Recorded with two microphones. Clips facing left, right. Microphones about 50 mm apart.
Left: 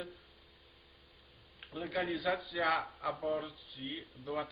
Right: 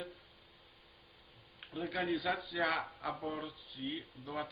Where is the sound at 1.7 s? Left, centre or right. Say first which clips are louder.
Even; centre.